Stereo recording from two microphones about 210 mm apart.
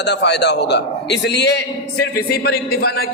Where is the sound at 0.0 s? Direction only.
55° left (ahead or behind).